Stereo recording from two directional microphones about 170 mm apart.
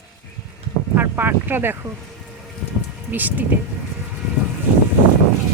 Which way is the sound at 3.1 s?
10° right (ahead or behind).